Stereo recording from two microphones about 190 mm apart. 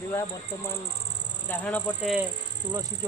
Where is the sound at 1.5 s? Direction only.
10° left (ahead or behind).